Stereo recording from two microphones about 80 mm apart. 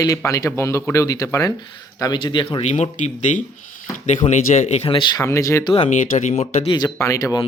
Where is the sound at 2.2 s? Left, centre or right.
Left.